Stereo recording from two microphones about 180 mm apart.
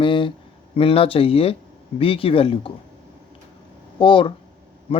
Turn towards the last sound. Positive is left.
turn(degrees=30)  # may be behind; listen again after turning